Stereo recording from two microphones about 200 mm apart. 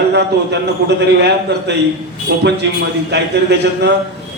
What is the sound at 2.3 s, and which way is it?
A man's voice, 60° right (ahead or behind).